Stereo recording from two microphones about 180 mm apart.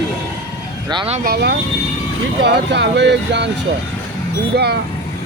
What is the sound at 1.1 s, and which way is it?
Speech, 55° right (ahead or behind).